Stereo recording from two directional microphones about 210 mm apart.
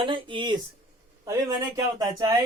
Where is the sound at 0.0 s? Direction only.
25° right (ahead or behind).